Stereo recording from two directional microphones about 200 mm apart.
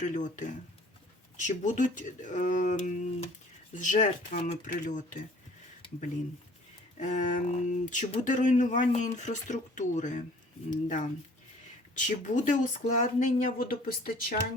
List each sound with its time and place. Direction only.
0.0 s speech: 40° left (ahead or behind)
6.9 s speech: 35° left (ahead or behind)